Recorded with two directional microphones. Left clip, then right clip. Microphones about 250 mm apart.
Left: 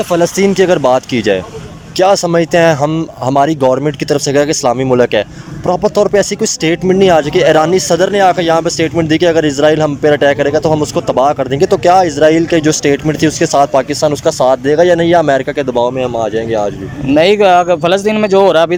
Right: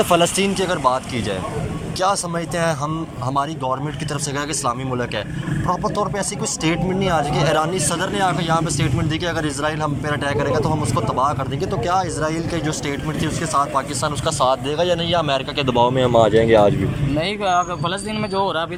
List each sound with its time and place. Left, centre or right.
0.1 s speech: left
17.2 s speech: left